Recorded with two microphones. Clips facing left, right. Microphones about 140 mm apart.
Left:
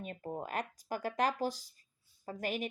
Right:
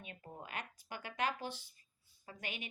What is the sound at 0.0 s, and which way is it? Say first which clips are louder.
Speech: left 10 dB; 40° left (ahead or behind).